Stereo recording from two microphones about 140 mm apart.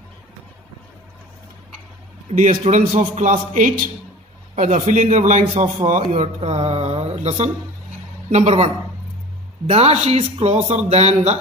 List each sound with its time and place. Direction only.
2.3 s a man's voice: 60° right (ahead or behind)
6.1 s speech: 50° right (ahead or behind)